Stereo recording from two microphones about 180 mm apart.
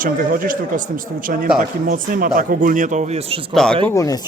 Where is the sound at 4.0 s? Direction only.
20° left (ahead or behind).